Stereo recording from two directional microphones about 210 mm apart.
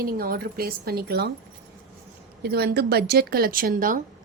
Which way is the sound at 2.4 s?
50° right (ahead or behind).